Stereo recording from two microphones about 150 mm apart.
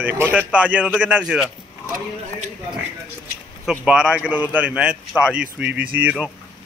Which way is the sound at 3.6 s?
5° right (ahead or behind).